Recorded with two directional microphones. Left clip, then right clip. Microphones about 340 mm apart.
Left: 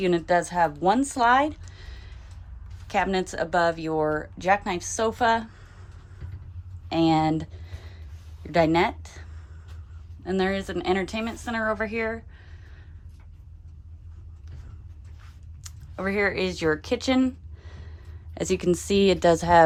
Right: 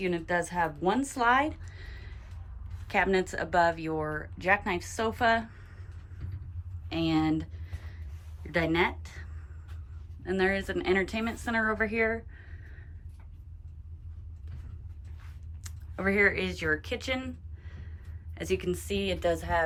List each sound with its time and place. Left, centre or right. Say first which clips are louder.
0.0 s speech: left 7 dB; centre
6.8 s a sound: left 7 dB; centre
8.5 s speech: left 6 dB; centre
10.2 s a woman's voice: left 2 dB; centre
15.6 s speech: left 1 dB; centre